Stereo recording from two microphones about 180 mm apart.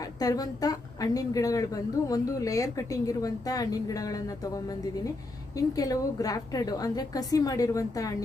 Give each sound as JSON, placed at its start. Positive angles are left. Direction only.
{"t": 0.2, "sound": "a woman's voice", "side_deg": 20}